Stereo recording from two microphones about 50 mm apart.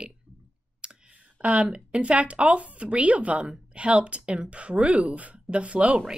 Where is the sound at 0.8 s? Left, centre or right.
Centre.